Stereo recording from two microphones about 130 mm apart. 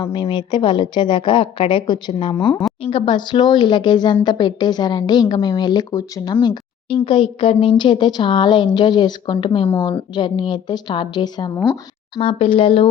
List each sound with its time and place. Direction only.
0.0 s speech: 35° left (ahead or behind)
6.3 s speech: 35° left (ahead or behind)
12.1 s speech: 45° left (ahead or behind)